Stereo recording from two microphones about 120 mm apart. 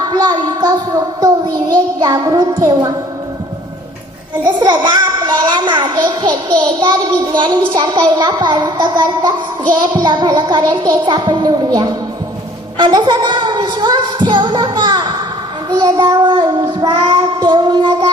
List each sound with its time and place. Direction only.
0.1 s a sound: 35° right (ahead or behind)
2.0 s a child's voice: 35° right (ahead or behind)
4.4 s a child's voice: 35° right (ahead or behind)